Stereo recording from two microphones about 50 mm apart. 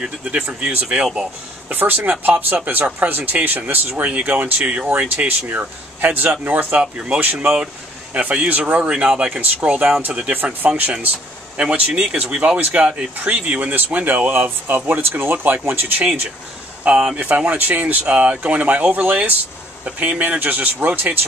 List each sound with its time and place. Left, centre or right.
0.0 s speech: right
0.8 s speech: centre
1.7 s speech: right
4.8 s speech: right
7.4 s speech: centre
8.1 s speech: right
10.3 s speech: right
14.7 s speech: right
16.0 s speech: right